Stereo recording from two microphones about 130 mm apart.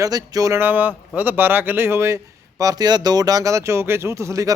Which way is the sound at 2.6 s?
30° right (ahead or behind).